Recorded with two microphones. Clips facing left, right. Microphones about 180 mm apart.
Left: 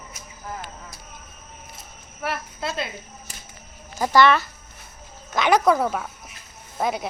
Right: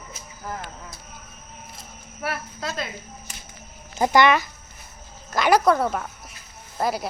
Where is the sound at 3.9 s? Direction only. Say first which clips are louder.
Even; 20° right (ahead or behind).